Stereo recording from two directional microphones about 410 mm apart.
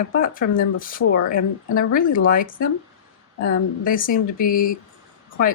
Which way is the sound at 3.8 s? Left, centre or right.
Centre.